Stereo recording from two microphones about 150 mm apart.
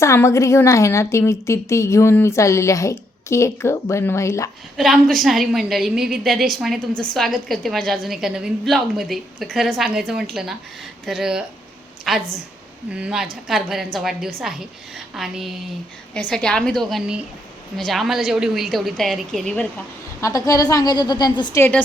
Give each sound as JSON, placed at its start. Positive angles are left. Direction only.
{"t": 0.0, "sound": "a woman's voice", "side_deg": 20}
{"t": 4.8, "sound": "a woman's voice", "side_deg": 0}
{"t": 20.2, "sound": "a woman's voice", "side_deg": 25}
{"t": 21.6, "sound": "a woman's voice", "side_deg": 10}